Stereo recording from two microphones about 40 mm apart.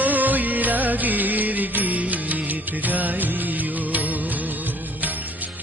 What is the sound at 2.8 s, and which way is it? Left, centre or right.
Music of bollywood, right.